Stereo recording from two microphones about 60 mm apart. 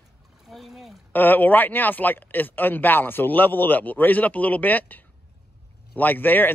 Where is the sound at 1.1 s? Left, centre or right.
Left.